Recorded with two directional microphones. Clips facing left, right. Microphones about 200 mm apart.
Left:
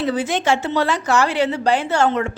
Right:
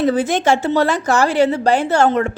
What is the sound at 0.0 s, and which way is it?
A woman's voice, 45° right (ahead or behind).